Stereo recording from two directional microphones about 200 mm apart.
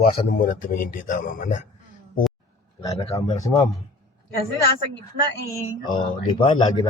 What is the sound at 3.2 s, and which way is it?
Speech, 15° left (ahead or behind).